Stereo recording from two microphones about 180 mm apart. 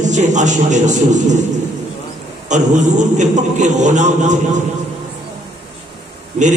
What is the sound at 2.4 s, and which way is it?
A man's voice, 40° right (ahead or behind).